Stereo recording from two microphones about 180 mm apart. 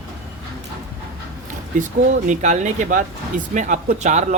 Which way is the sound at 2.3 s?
40° right (ahead or behind).